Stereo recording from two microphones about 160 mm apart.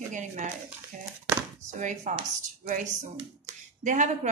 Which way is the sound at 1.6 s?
50° right (ahead or behind).